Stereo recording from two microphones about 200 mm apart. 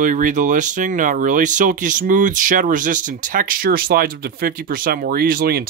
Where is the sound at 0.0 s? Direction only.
40° right (ahead or behind).